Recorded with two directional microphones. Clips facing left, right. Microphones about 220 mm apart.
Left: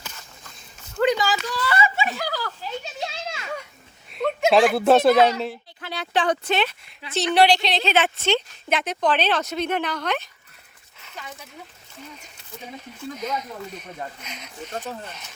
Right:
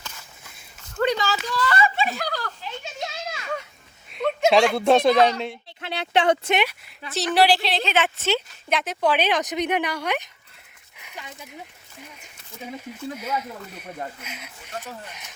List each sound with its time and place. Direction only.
0.9 s a sound: 10° left (ahead or behind)
2.8 s children playing: 30° left (ahead or behind)
4.1 s speech: centre (ahead or behind)
5.8 s a sound: 25° right (ahead or behind)
7.3 s speech: 5° right (ahead or behind)
7.9 s a woman's voice: 35° left (ahead or behind)
8.2 s speech: centre (ahead or behind)
13.1 s speech: 10° right (ahead or behind)